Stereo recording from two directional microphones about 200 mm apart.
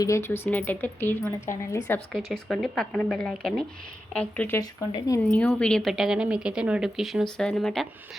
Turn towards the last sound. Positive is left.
turn(degrees=0)  # may be behind; listen again after turning